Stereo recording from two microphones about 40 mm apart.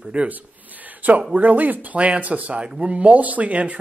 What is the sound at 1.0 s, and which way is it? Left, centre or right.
A woman's voice, right.